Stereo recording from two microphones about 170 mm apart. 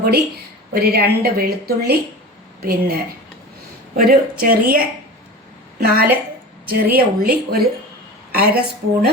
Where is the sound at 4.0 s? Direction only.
60° right (ahead or behind).